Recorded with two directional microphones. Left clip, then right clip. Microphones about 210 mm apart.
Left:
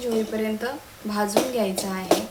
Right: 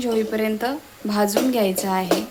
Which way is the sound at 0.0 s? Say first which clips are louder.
Right 3 dB; 45° right (ahead or behind).